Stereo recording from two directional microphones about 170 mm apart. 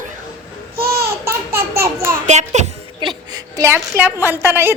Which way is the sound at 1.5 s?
15° right (ahead or behind).